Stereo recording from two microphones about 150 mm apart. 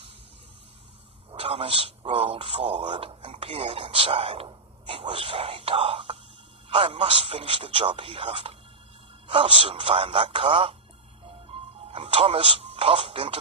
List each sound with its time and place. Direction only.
1.3 s a man's voice: 40° right (ahead or behind)
11.3 s music: 40° right (ahead or behind)